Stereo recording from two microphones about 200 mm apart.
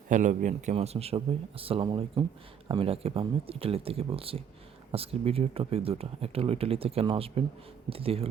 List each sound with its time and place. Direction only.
0.1 s speech: 40° right (ahead or behind)